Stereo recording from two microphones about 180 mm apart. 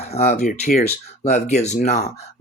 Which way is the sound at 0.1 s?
40° left (ahead or behind).